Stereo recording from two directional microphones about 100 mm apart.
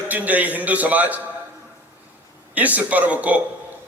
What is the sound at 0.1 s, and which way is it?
A man's voice, 15° right (ahead or behind).